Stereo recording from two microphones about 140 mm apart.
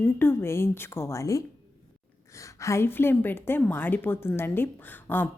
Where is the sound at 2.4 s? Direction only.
20° left (ahead or behind).